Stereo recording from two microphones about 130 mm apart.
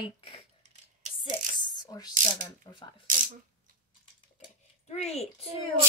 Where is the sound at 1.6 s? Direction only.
30° left (ahead or behind).